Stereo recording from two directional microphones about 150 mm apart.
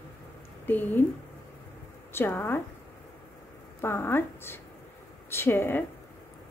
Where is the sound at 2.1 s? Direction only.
15° left (ahead or behind).